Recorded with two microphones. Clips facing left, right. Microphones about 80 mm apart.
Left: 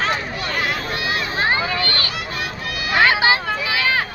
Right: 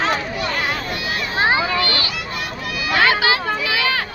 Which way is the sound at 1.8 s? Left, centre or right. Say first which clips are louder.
Right 2 dB; left.